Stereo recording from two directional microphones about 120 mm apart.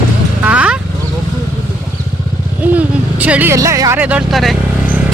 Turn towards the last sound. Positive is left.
turn(degrees=0)  # may be behind; listen again after turning